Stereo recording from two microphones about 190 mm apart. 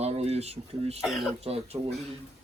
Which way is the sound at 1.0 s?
Centre (ahead or behind).